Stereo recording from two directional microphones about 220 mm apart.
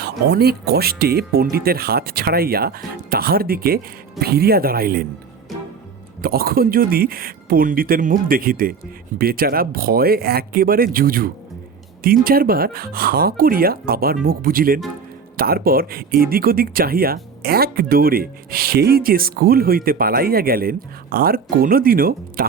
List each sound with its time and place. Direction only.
0.0 s speech: 45° right (ahead or behind)
6.2 s speech: 40° right (ahead or behind)